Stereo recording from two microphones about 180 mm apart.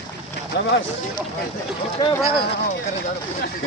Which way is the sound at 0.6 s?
65° left (ahead or behind).